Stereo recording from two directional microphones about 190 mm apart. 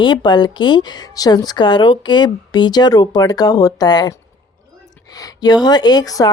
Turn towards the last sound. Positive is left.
turn(degrees=20)  # may be behind; listen again after turning